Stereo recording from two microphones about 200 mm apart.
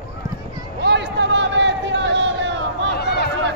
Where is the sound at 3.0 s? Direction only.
55° left (ahead or behind).